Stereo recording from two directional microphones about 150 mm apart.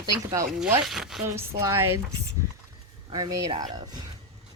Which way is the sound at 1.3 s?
15° right (ahead or behind).